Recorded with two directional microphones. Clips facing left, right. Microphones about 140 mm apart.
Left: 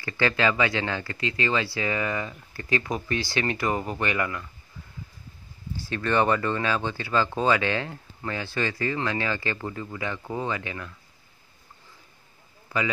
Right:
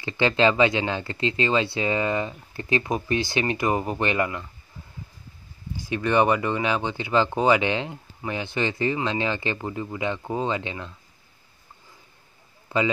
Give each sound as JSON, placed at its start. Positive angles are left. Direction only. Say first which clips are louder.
{"t": 0.0, "sound": "speech", "louder": "right 4 dB", "side_deg": -20}
{"t": 5.8, "sound": "speech", "louder": "right 3 dB", "side_deg": -15}
{"t": 12.6, "sound": "a sound", "louder": "right 4 dB", "side_deg": -25}